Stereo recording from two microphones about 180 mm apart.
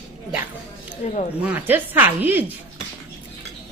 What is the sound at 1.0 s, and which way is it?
Speech, 40° left (ahead or behind).